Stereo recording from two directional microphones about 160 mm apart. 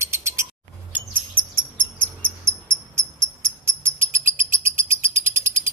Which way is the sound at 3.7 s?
15° right (ahead or behind).